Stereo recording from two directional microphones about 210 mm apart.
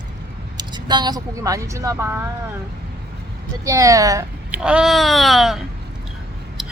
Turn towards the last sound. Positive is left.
turn(degrees=0)  # may be behind; listen again after turning